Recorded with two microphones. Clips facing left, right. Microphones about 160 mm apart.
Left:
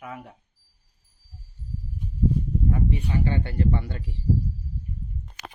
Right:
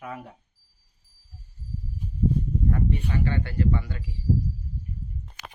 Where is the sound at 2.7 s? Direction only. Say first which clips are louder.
Left 1 dB; 10° left (ahead or behind).